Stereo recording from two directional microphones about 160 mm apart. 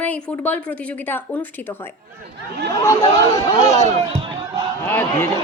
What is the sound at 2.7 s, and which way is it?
Speech, 20° left (ahead or behind).